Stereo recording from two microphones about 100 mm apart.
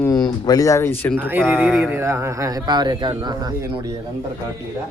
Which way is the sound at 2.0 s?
25° right (ahead or behind).